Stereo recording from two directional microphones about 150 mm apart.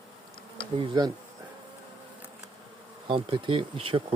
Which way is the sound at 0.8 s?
30° right (ahead or behind).